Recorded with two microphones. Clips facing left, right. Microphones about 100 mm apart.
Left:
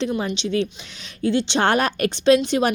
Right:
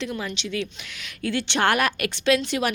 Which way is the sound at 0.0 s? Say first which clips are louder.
Left 6 dB; 25° left (ahead or behind).